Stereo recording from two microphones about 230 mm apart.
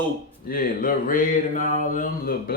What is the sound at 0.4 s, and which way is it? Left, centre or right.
Speech, left.